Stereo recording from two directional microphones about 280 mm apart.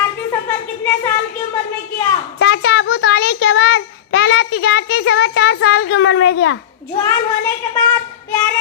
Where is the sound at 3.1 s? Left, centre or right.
Left.